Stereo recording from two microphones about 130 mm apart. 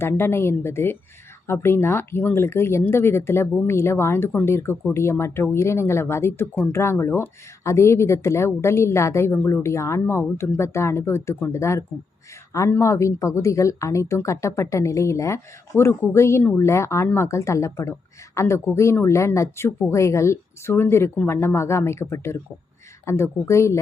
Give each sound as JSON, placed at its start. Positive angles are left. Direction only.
{"t": 0.0, "sound": "a woman's voice", "side_deg": 20}